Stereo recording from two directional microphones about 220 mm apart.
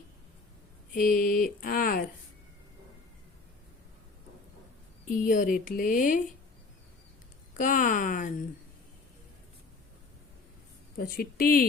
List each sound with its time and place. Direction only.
0.9 s speech: 40° left (ahead or behind)
5.0 s speech: 40° left (ahead or behind)
7.6 s speech: 35° left (ahead or behind)
10.9 s speech: 40° left (ahead or behind)